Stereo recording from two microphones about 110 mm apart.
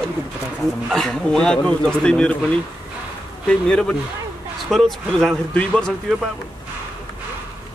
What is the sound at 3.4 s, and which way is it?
A man's voice, 10° left (ahead or behind).